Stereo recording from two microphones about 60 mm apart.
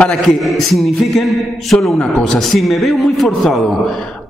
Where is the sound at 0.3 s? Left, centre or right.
Centre.